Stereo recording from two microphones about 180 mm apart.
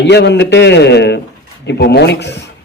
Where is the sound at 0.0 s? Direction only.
70° left (ahead or behind).